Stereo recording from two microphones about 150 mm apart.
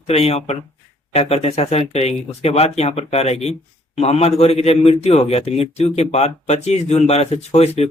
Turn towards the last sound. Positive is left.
turn(degrees=45)  # may be behind; listen again after turning